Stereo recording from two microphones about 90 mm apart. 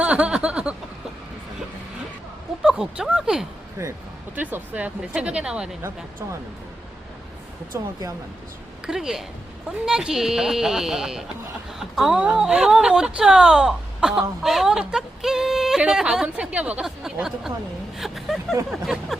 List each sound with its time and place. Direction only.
0.0 s a sound: 15° right (ahead or behind)
2.6 s a sound: 5° right (ahead or behind)
3.0 s speech: 5° right (ahead or behind)
3.8 s speech: 35° right (ahead or behind)
4.4 s speech: 15° right (ahead or behind)
7.7 s speech: 35° right (ahead or behind)
8.9 s speech: 5° right (ahead or behind)